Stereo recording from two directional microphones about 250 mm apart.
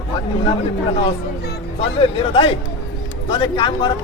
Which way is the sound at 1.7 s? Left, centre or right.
Left.